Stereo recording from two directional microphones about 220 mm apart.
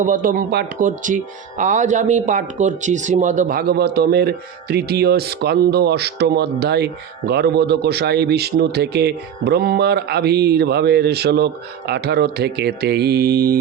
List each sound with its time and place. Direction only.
0.0 s speech: 35° right (ahead or behind)